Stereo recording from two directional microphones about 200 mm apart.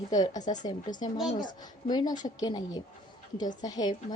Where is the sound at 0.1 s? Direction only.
20° left (ahead or behind).